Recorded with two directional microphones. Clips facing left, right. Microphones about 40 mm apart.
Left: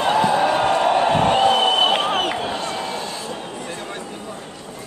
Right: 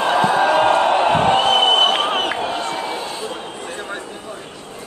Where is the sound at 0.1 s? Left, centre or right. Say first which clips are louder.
Right 2 dB; right.